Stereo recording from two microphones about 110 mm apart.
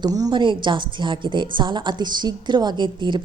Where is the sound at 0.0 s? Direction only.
35° right (ahead or behind).